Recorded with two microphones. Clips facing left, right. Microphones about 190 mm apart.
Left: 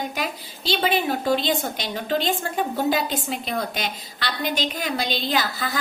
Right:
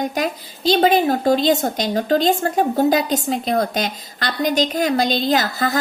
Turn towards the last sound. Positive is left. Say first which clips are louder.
# right 6 dB
turn(degrees=-45)  # may be behind; listen again after turning